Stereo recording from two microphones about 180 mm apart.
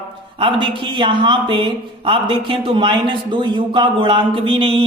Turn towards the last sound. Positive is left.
turn(degrees=-30)  # may be behind; listen again after turning